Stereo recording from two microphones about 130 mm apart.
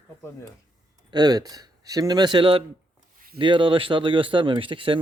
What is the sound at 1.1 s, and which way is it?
Speech, 30° right (ahead or behind).